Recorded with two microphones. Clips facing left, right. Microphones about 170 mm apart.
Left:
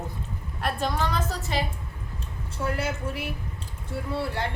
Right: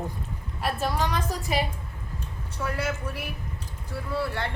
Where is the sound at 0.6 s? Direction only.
10° right (ahead or behind).